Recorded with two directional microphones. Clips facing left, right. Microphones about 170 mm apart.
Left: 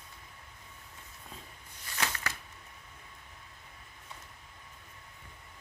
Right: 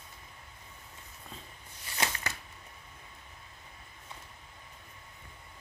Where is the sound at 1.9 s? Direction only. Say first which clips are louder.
Right 1 dB; 30° right (ahead or behind).